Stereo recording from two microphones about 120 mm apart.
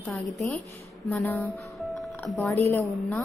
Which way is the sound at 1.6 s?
Centre (ahead or behind).